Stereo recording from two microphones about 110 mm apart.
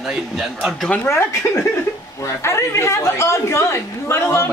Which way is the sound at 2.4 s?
25° left (ahead or behind).